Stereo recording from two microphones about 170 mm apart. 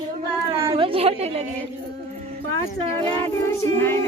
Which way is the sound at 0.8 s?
35° right (ahead or behind).